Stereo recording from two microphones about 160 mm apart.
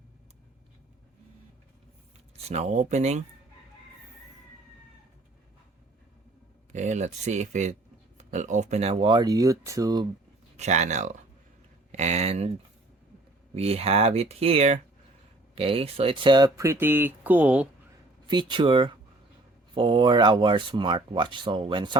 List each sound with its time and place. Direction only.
2.5 s speech: 45° right (ahead or behind)
6.7 s speech: 45° right (ahead or behind)
9.0 s speech: 25° right (ahead or behind)
10.6 s speech: 45° right (ahead or behind)
13.5 s speech: 40° right (ahead or behind); by 17.7 s 10° right (ahead or behind)
18.3 s speech: 30° right (ahead or behind)